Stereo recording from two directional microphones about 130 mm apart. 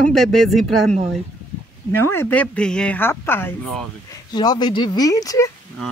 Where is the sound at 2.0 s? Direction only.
15° left (ahead or behind).